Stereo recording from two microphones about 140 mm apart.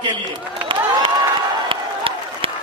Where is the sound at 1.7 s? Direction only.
40° right (ahead or behind).